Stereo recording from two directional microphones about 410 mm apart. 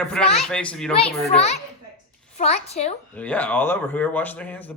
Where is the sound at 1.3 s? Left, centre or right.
Centre.